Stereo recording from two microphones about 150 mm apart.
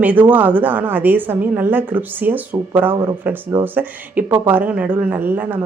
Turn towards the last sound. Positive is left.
turn(degrees=-10)  # may be behind; listen again after turning